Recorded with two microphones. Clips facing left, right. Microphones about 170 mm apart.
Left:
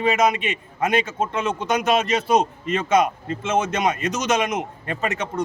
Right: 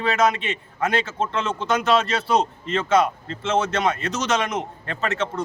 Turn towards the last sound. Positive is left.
turn(degrees=15)  # may be behind; listen again after turning